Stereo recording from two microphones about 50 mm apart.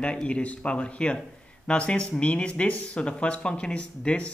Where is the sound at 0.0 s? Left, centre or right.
Left.